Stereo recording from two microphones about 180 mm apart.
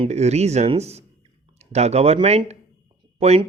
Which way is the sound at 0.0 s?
35° right (ahead or behind).